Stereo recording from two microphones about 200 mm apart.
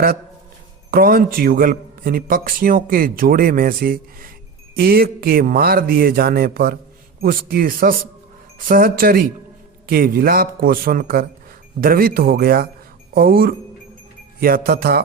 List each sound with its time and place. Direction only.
0.9 s a man's voice: 50° right (ahead or behind)